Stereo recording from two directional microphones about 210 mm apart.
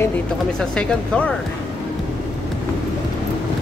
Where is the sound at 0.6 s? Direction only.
5° left (ahead or behind).